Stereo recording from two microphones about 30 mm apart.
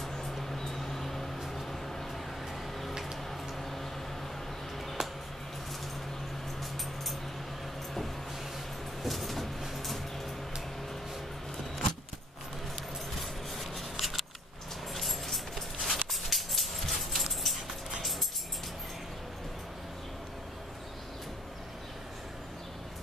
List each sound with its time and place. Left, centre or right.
0.1 s vehicle: centre
1.5 s a sound: centre
5.0 s music: centre
9.0 s vehicle: centre
13.2 s scissors: centre
15.0 s a sound: centre